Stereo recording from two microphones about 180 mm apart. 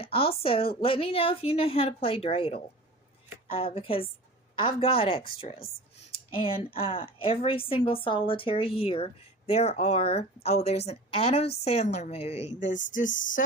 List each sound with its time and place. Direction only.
0.0 s a woman's voice: 30° left (ahead or behind)
6.3 s a woman's voice: 30° left (ahead or behind)